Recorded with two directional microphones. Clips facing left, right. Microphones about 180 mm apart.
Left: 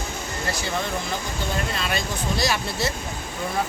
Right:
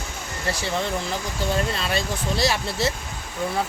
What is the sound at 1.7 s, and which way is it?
Speech, 30° right (ahead or behind).